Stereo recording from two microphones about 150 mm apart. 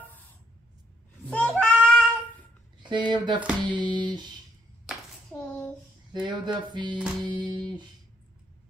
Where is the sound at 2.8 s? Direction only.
30° right (ahead or behind).